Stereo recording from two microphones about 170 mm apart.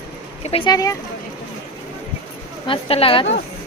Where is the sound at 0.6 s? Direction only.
20° left (ahead or behind).